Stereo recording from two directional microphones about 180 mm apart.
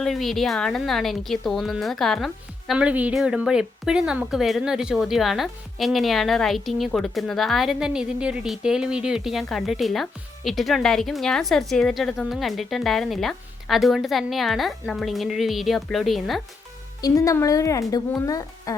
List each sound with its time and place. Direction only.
0.0 s a woman's voice: centre (ahead or behind)
17.0 s speech: 20° left (ahead or behind)